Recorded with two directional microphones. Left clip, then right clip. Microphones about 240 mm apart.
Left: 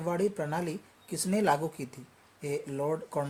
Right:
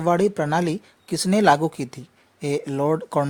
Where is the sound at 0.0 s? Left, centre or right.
Right.